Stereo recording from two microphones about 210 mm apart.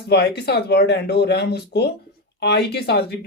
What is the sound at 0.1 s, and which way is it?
A woman's voice, 50° left (ahead or behind).